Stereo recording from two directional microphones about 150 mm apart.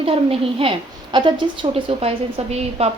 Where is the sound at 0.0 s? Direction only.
40° right (ahead or behind).